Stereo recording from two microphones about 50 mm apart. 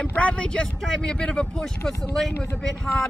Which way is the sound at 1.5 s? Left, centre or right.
Centre.